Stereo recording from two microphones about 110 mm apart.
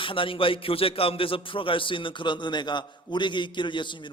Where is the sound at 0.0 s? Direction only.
50° left (ahead or behind).